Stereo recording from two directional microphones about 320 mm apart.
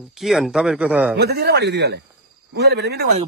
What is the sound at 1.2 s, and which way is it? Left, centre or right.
Speech, right.